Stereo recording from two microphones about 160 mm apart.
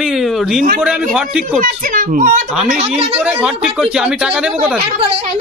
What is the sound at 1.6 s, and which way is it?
Speech, 55° right (ahead or behind).